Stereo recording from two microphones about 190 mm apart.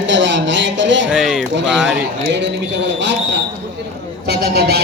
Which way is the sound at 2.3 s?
65° right (ahead or behind).